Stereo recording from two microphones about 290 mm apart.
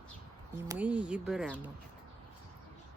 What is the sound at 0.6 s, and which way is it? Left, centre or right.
Speech, centre.